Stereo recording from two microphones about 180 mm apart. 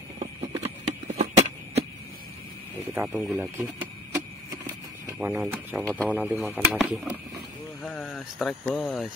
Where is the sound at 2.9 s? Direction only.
10° right (ahead or behind).